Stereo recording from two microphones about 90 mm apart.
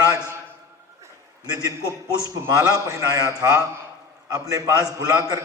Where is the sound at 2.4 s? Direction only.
40° right (ahead or behind).